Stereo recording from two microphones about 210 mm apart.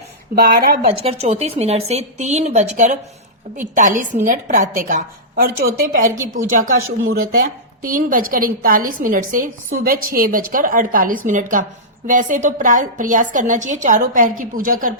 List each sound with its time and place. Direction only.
0.4 s speech: 45° right (ahead or behind)
0.9 s a woman's voice: 30° right (ahead or behind)